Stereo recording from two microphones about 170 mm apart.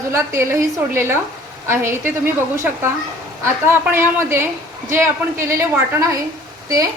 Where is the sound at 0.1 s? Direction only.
15° right (ahead or behind).